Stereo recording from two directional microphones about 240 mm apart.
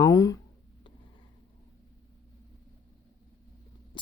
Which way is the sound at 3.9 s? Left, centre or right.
Centre.